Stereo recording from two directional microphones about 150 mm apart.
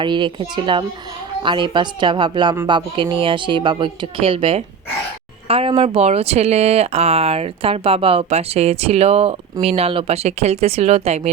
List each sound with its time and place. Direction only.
0.0 s speech: 35° right (ahead or behind)